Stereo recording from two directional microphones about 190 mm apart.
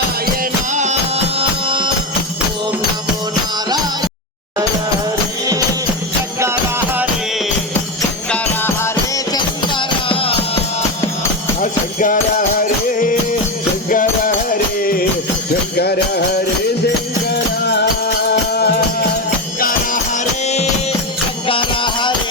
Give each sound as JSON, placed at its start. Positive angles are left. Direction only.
{"t": 0.7, "sound": "music", "side_deg": -40}
{"t": 6.4, "sound": "music", "side_deg": -10}
{"t": 8.3, "sound": "music", "side_deg": 10}
{"t": 11.6, "sound": "music", "side_deg": 45}
{"t": 15.8, "sound": "music", "side_deg": 55}
{"t": 18.3, "sound": "music", "side_deg": 60}
{"t": 19.5, "sound": "music", "side_deg": 50}
{"t": 21.4, "sound": "music", "side_deg": 25}